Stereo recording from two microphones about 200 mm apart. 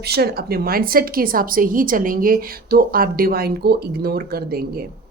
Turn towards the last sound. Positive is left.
turn(degrees=-50)  # may be behind; listen again after turning